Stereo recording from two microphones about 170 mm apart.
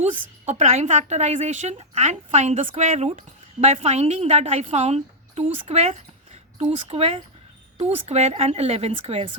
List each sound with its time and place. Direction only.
0.0 s a woman's voice: 45° right (ahead or behind)